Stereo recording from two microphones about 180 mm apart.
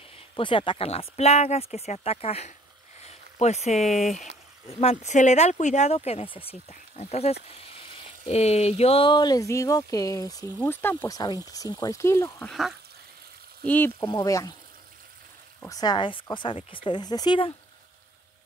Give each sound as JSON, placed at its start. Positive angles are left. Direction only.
{"t": 0.4, "sound": "speech", "side_deg": 30}
{"t": 12.4, "sound": "speech", "side_deg": 0}
{"t": 13.7, "sound": "speech", "side_deg": 10}
{"t": 15.6, "sound": "speech", "side_deg": 20}